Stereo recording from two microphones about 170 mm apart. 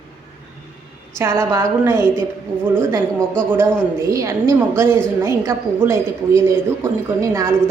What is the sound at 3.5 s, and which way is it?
A woman's voice, 15° right (ahead or behind).